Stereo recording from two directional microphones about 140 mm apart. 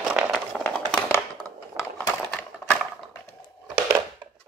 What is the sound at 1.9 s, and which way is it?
Typewriter, 10° left (ahead or behind).